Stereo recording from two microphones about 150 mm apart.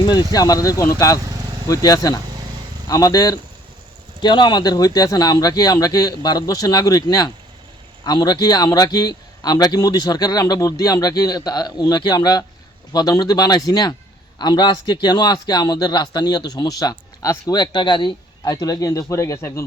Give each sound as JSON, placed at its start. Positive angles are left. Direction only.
{"t": 0.0, "sound": "a man's voice", "side_deg": 25}